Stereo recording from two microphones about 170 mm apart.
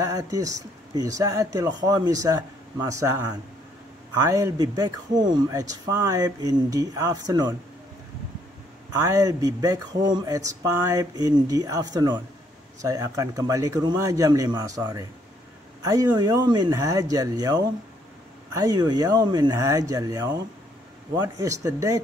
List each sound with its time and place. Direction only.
0.0 s speech: 20° right (ahead or behind)
4.2 s speech: 20° right (ahead or behind)
9.0 s speech: 20° right (ahead or behind)